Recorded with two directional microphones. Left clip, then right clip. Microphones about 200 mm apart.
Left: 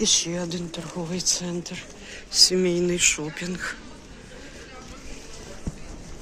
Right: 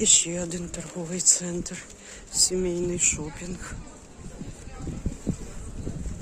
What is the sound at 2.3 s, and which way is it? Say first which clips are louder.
Speech: left 6 dB; 15° right (ahead or behind).